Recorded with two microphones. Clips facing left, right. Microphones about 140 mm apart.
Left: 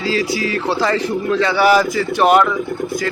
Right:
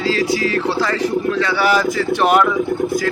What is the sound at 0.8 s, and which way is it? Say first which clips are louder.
Speech: even; 25° left (ahead or behind).